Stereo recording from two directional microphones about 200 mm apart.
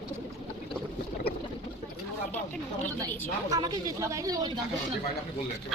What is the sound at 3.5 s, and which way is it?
A woman's voice, 20° right (ahead or behind).